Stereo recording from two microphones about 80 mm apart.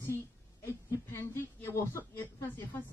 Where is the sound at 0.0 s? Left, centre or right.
Left.